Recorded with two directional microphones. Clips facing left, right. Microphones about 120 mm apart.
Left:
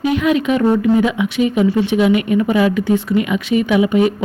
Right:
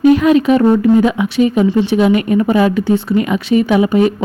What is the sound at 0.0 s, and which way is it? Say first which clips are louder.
A woman's voice: right 6 dB; 40° right (ahead or behind).